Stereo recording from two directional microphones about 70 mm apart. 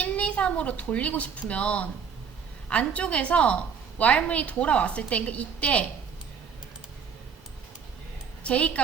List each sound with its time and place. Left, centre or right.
0.0 s a woman's voice: centre
8.4 s a woman's voice: centre